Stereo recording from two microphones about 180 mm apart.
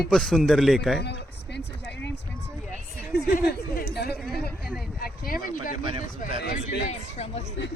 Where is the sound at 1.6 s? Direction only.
75° left (ahead or behind).